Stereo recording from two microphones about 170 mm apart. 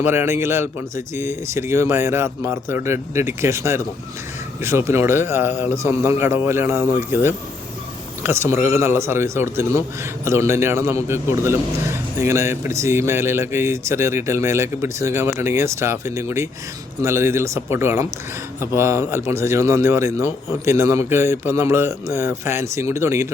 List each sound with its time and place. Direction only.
0.0 s a man's voice: 15° right (ahead or behind)